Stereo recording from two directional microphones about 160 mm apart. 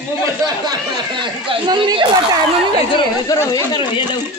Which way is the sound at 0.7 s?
30° right (ahead or behind).